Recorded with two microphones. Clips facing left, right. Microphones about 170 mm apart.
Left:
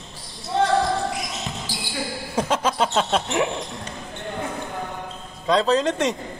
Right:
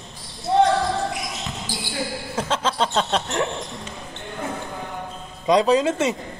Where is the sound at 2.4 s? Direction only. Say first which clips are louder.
Left 2 dB; 10° left (ahead or behind).